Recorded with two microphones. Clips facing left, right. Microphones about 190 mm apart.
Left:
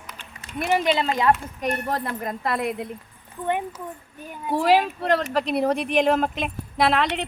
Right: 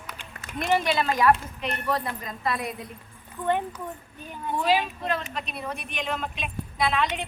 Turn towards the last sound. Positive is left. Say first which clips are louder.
# left 4 dB
turn(degrees=75)  # may be behind; listen again after turning